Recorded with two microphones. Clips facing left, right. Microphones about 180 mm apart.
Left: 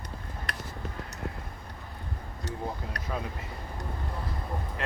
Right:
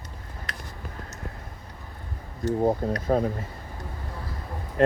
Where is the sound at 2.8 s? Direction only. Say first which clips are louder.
Right 13 dB; 45° right (ahead or behind).